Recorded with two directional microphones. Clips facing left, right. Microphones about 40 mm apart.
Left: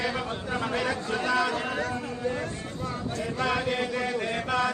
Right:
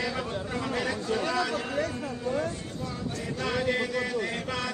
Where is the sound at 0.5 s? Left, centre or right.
Left.